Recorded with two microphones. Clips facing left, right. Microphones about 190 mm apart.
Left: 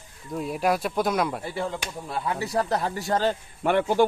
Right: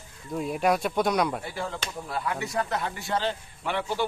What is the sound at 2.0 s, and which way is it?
A man's voice, 25° left (ahead or behind).